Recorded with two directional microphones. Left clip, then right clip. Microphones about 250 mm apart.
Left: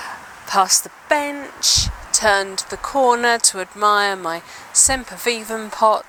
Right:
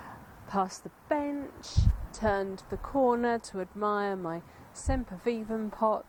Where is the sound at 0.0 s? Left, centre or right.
Centre.